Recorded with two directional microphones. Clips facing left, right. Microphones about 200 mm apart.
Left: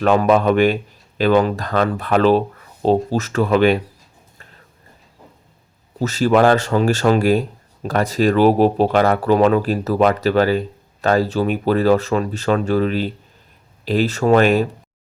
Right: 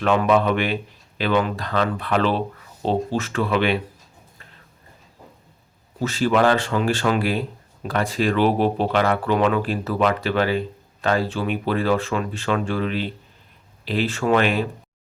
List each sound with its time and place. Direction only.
0.0 s speech: 40° left (ahead or behind)
6.0 s speech: 40° left (ahead or behind)